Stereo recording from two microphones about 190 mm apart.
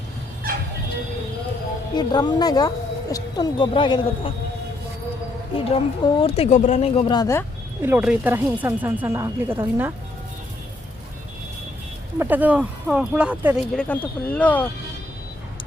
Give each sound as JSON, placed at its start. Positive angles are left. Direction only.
{"t": 2.0, "sound": "a woman's voice", "side_deg": 20}
{"t": 5.5, "sound": "a woman's voice", "side_deg": 30}
{"t": 7.8, "sound": "speech", "side_deg": -10}
{"t": 12.2, "sound": "speech", "side_deg": -10}
{"t": 13.7, "sound": "speech", "side_deg": 10}